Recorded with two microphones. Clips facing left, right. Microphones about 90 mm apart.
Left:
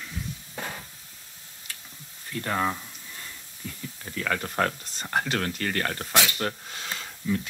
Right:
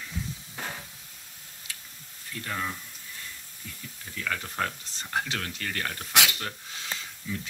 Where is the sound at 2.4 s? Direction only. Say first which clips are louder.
Left 7 dB; 55° left (ahead or behind).